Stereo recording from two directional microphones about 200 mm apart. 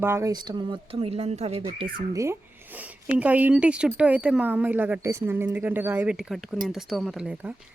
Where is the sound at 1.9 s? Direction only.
15° right (ahead or behind).